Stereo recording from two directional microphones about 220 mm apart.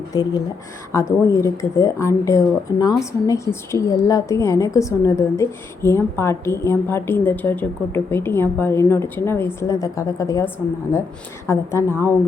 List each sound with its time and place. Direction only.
0.1 s speech: 15° left (ahead or behind)